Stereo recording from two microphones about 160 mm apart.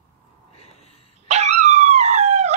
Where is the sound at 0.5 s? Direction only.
40° left (ahead or behind).